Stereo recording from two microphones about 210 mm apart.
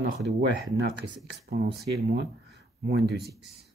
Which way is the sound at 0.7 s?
55° right (ahead or behind).